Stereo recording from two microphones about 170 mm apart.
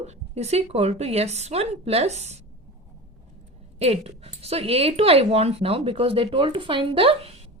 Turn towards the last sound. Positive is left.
turn(degrees=-35)  # may be behind; listen again after turning